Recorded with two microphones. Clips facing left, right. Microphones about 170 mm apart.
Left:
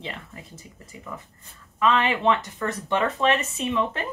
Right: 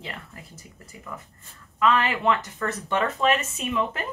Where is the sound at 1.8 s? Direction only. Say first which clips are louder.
Left 1 dB; 25° left (ahead or behind).